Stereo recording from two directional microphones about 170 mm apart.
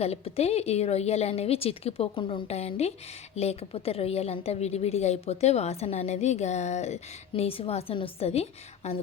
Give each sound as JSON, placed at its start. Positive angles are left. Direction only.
{"t": 0.0, "sound": "a woman's voice", "side_deg": 35}